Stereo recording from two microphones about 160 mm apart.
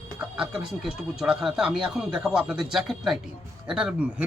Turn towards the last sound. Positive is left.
turn(degrees=-5)  # may be behind; listen again after turning